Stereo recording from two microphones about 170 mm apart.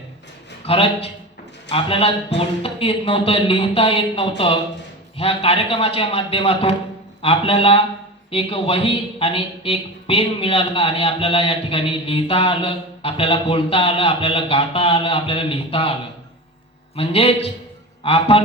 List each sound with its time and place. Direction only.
0.6 s a man's voice: 35° left (ahead or behind)
16.9 s a man's voice: 35° left (ahead or behind)